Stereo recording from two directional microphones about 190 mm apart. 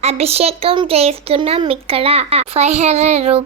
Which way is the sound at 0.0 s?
35° right (ahead or behind).